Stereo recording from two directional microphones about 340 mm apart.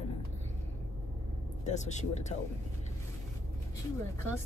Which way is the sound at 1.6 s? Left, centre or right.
Centre.